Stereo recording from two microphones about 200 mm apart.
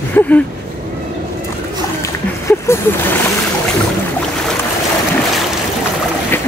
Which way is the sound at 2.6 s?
10° left (ahead or behind).